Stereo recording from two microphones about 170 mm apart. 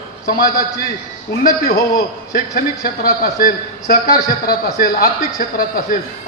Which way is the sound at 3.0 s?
55° left (ahead or behind).